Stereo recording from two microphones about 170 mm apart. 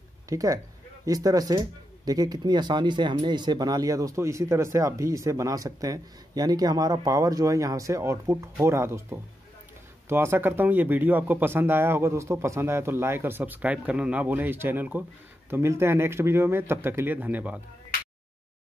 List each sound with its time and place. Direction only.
0.3 s speech: 20° right (ahead or behind)